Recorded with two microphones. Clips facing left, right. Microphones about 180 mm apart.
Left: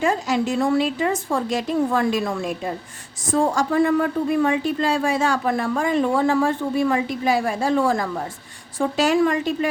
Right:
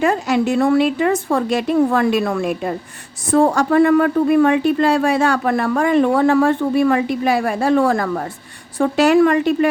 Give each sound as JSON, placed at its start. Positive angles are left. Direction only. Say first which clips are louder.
{"t": 0.0, "sound": "a woman's voice", "louder": "right 4 dB", "side_deg": -65}